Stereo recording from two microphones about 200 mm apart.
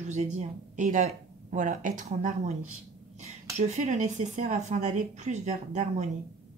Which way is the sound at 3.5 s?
35° right (ahead or behind).